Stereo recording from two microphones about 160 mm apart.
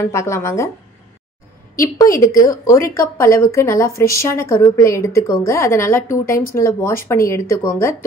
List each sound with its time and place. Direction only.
0.1 s speech: 15° left (ahead or behind)
1.8 s a woman's voice: 20° left (ahead or behind)